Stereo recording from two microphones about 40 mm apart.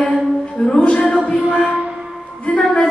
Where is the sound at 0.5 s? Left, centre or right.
Left.